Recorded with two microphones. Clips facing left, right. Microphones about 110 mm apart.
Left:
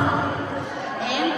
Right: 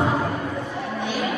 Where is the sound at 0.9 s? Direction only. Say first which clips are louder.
Left 2 dB; 90° left.